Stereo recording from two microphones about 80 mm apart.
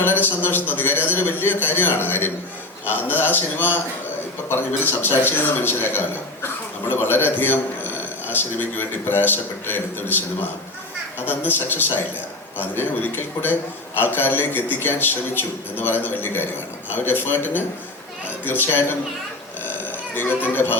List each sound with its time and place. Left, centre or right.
0.0 s a man's voice: left
20.1 s a man's voice: left